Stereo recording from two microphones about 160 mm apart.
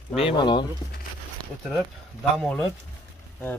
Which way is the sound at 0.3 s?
30° left (ahead or behind).